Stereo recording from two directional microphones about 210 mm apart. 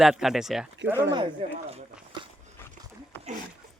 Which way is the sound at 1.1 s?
25° right (ahead or behind).